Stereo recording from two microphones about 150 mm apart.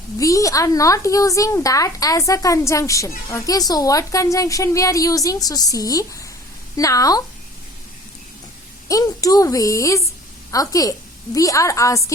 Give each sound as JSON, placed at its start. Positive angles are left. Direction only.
{"t": 0.2, "sound": "speech", "side_deg": 20}
{"t": 8.9, "sound": "speech", "side_deg": 25}